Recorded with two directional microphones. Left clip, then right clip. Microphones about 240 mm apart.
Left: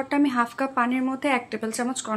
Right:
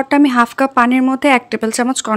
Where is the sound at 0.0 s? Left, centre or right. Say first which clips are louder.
Right 11 dB; right.